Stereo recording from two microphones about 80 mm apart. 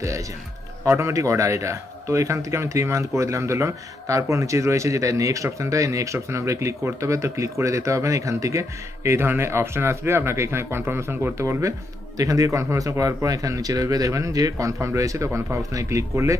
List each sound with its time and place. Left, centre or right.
0.8 s speech: right
12.2 s speech: right